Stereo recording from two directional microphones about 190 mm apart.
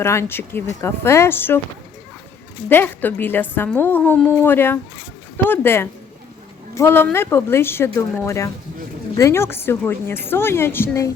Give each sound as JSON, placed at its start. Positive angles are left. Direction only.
{"t": 0.0, "sound": "a woman's voice", "side_deg": 15}
{"t": 2.6, "sound": "a woman's voice", "side_deg": 10}